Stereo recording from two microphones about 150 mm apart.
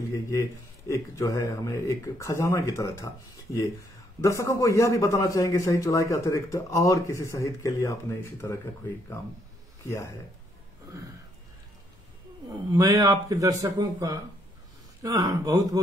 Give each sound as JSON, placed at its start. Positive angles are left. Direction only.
{"t": 0.1, "sound": "a man's voice", "side_deg": 20}
{"t": 4.2, "sound": "a man's voice", "side_deg": 20}
{"t": 12.7, "sound": "speech", "side_deg": -20}